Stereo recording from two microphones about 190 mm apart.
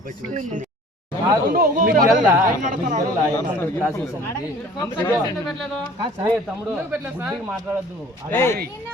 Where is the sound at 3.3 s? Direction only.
10° left (ahead or behind).